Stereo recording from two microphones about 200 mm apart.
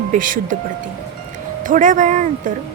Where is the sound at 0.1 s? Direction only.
40° right (ahead or behind).